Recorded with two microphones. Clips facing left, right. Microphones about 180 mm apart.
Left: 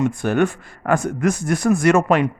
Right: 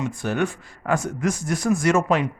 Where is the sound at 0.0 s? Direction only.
50° left (ahead or behind).